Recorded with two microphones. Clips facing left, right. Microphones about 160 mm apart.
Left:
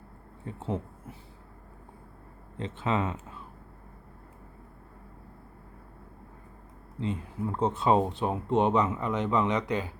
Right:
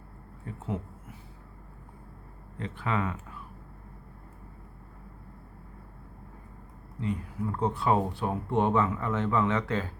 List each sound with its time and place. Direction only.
0.4 s speech: 30° left (ahead or behind)
2.6 s speech: 20° left (ahead or behind)
7.0 s speech: 25° left (ahead or behind)